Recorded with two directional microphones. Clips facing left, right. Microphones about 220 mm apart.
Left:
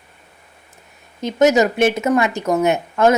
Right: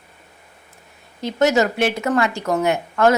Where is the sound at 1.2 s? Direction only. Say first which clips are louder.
Left 3 dB; 20° left (ahead or behind).